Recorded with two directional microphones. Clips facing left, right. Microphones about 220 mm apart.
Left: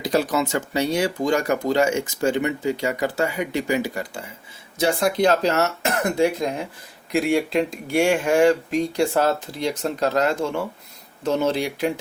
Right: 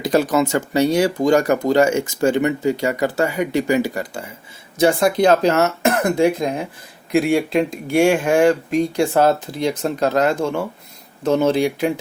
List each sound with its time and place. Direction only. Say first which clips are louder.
0.0 s speech: right 4 dB; 50° right (ahead or behind)